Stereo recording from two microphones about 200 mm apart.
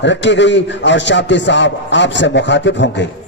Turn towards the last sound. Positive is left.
turn(degrees=65)  # may be behind; listen again after turning